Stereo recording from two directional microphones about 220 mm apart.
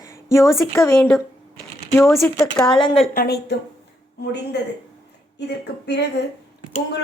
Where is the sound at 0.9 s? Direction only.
Centre (ahead or behind).